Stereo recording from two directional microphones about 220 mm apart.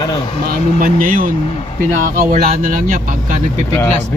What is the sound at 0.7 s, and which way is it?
Speech, 40° right (ahead or behind).